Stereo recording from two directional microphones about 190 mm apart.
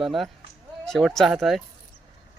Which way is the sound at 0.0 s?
Centre (ahead or behind).